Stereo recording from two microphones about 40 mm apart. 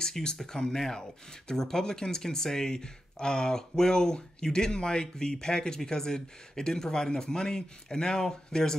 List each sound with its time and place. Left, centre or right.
0.0 s speech: centre